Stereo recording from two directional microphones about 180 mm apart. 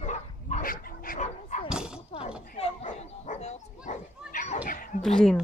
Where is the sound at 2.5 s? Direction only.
40° left (ahead or behind).